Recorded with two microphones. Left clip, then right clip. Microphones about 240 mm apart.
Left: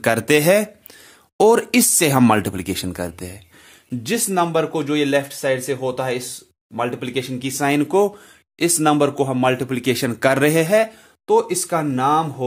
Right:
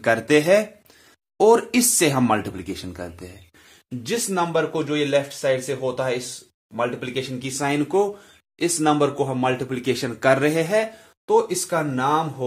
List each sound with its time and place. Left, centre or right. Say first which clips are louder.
0.0 s speech: left 2 dB; left